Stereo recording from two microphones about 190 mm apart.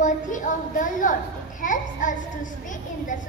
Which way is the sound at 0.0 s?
45° left (ahead or behind).